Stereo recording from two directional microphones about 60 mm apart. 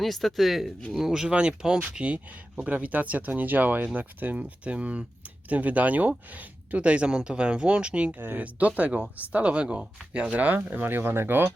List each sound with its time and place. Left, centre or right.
0.0 s speech: centre
8.2 s speech: right
8.5 s speech: right